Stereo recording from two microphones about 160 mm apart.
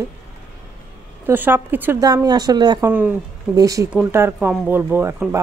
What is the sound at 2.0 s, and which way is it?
Speech, 25° right (ahead or behind).